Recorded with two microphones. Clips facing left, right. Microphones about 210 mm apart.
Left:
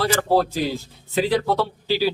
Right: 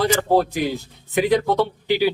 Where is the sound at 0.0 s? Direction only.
20° right (ahead or behind).